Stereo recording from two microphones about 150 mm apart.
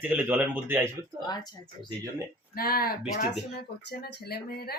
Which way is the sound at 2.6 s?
90° left.